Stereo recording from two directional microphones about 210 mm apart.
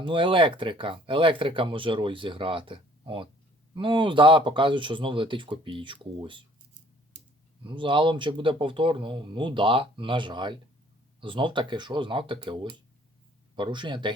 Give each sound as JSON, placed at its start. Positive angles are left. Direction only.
{"t": 0.0, "sound": "speech", "side_deg": -25}
{"t": 7.6, "sound": "speech", "side_deg": -25}